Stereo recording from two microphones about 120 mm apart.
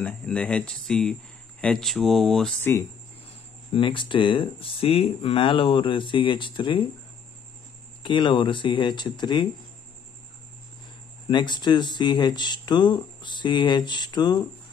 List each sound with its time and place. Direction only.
0.0 s speech: 10° left (ahead or behind)
3.7 s speech: 45° left (ahead or behind)
8.0 s speech: 40° left (ahead or behind)
11.2 s speech: 40° left (ahead or behind)